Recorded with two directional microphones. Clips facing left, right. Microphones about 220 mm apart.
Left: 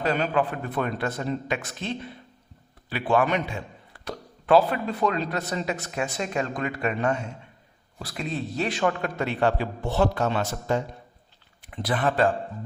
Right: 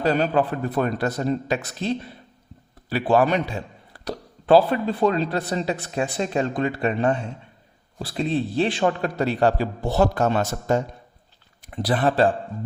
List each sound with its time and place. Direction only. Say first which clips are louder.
0.0 s a man's voice: right 4 dB; 35° right (ahead or behind)